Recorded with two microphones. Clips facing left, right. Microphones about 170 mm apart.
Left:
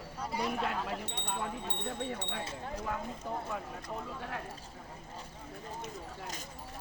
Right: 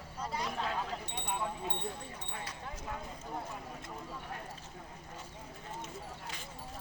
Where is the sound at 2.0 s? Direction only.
90° left.